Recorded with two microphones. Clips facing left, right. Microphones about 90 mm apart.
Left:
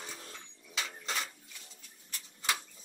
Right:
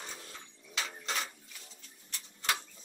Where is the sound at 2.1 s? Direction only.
5° left (ahead or behind).